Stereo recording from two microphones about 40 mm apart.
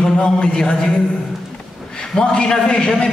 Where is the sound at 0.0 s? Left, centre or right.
Centre.